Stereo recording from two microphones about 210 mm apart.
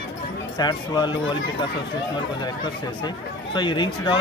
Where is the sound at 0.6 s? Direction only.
20° left (ahead or behind).